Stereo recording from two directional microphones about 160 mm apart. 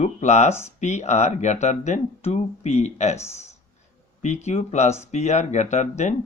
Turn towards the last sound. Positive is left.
turn(degrees=45)  # may be behind; listen again after turning